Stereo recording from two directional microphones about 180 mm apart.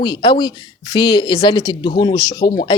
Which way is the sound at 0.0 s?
25° left (ahead or behind).